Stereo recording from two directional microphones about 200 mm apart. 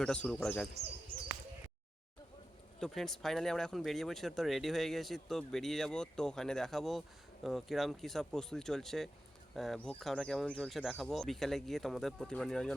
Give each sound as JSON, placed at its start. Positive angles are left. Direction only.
{"t": 0.0, "sound": "speech", "side_deg": 5}
{"t": 0.7, "sound": "speech", "side_deg": -30}
{"t": 2.8, "sound": "speech", "side_deg": 0}